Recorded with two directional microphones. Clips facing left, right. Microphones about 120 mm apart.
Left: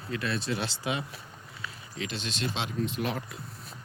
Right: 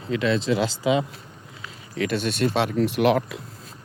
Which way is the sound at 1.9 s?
55° right (ahead or behind).